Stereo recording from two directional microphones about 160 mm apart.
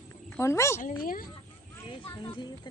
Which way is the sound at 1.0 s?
60° left (ahead or behind).